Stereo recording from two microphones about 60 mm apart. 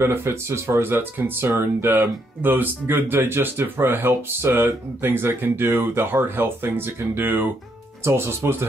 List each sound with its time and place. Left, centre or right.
0.0 s speech: right
8.0 s speech: right